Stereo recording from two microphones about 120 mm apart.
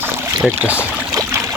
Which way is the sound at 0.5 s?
10° right (ahead or behind).